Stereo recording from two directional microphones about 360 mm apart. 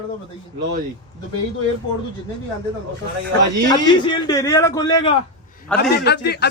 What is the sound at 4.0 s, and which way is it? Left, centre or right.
A man's voice, centre.